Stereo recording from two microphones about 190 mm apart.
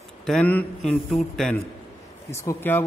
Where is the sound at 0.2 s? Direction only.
5° left (ahead or behind).